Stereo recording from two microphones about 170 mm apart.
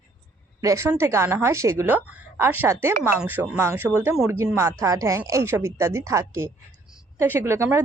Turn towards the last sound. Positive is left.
turn(degrees=-15)  # may be behind; listen again after turning